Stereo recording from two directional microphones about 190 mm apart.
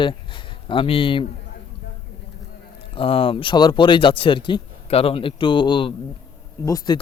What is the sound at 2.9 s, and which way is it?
Speech, 30° left (ahead or behind).